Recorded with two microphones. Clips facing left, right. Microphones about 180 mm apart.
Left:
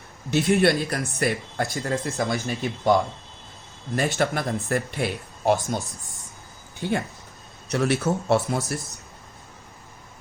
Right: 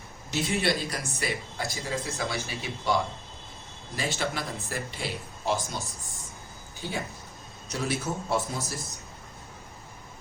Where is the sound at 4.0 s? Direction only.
55° left (ahead or behind).